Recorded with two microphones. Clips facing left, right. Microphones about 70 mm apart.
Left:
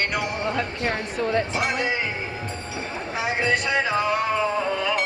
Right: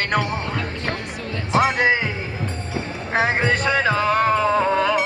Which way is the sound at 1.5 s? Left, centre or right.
Right.